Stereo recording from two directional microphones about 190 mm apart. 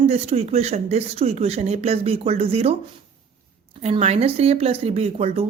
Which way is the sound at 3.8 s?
35° right (ahead or behind).